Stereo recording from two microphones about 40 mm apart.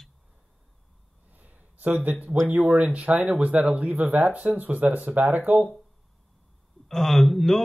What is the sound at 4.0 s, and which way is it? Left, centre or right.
Speech, right.